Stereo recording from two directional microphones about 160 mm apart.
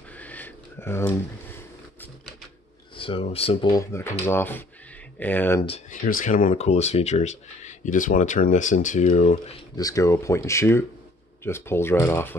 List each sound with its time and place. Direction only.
0.2 s a sound: 10° left (ahead or behind)
3.0 s speech: 35° left (ahead or behind)
3.7 s speech: 15° left (ahead or behind)
5.9 s speech: 55° left (ahead or behind)
6.5 s speech: 40° left (ahead or behind)
9.8 s speech: 20° left (ahead or behind)